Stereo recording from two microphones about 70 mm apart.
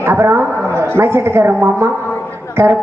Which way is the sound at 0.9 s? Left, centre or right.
Right.